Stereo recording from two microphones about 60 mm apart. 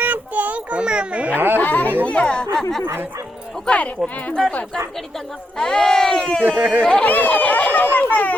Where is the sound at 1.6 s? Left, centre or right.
Left.